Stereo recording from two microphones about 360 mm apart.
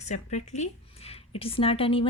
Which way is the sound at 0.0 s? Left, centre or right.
Centre.